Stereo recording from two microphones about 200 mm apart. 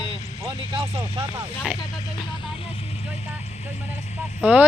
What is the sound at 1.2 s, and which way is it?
Speech, 10° right (ahead or behind).